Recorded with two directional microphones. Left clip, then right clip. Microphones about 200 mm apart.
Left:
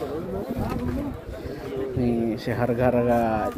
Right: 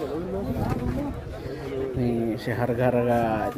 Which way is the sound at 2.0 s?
Centre (ahead or behind).